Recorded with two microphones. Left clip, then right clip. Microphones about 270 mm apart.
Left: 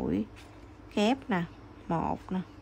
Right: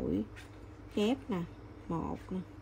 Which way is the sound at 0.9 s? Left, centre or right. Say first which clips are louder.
Left 5 dB; left.